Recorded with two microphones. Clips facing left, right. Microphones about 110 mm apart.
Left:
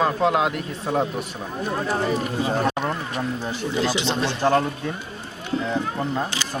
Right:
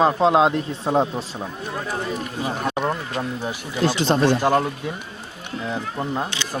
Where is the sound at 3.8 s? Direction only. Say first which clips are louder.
Right 10 dB; 45° right (ahead or behind).